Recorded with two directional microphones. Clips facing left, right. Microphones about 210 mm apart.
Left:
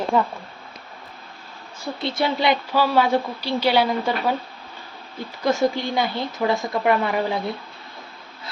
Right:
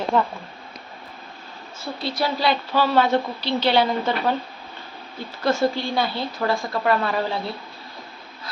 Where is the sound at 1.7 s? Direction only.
20° left (ahead or behind).